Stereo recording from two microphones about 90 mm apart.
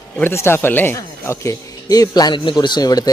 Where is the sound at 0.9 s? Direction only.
35° left (ahead or behind).